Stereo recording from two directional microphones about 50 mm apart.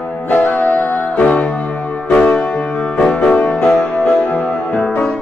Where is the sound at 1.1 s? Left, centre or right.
Left.